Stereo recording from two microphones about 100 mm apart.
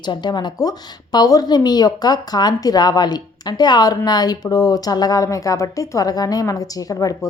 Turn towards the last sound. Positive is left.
turn(degrees=35)  # may be behind; listen again after turning